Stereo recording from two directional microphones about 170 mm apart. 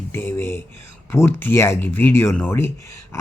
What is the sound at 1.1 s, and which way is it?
A man's voice, 15° left (ahead or behind).